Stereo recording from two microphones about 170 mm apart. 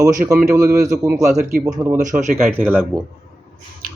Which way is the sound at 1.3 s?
45° right (ahead or behind).